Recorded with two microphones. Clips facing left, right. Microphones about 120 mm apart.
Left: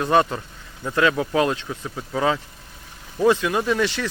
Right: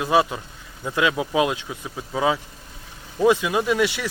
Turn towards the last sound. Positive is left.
turn(degrees=-10)  # may be behind; listen again after turning